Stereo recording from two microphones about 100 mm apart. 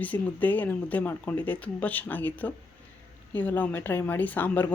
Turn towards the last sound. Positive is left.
turn(degrees=15)  # may be behind; listen again after turning